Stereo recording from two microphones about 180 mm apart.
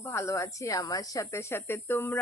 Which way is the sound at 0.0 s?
15° left (ahead or behind).